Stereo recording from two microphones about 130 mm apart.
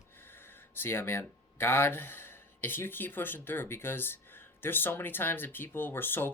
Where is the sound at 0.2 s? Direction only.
15° left (ahead or behind).